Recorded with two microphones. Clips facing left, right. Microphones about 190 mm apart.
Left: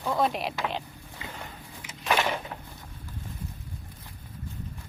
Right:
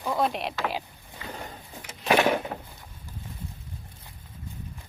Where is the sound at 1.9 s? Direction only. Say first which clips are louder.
Right 5 dB; 55° right (ahead or behind).